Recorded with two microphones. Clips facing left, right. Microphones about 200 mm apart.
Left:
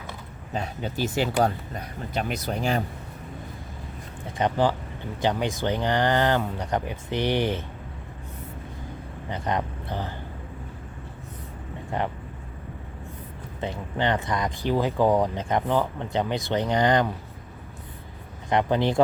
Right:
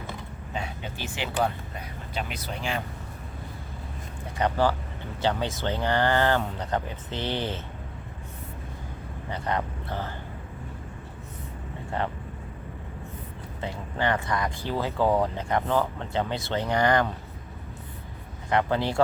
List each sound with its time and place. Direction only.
0.5 s speech: 40° left (ahead or behind)
4.4 s speech: 20° left (ahead or behind)
9.3 s speech: 15° left (ahead or behind)
11.9 s speech: 15° left (ahead or behind)
13.6 s speech: 20° left (ahead or behind)
18.4 s speech: 20° left (ahead or behind)